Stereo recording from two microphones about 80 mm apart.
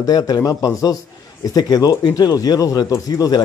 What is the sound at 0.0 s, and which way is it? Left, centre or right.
A man's voice, left.